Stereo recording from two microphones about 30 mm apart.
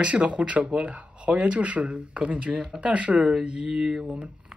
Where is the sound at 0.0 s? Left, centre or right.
Right.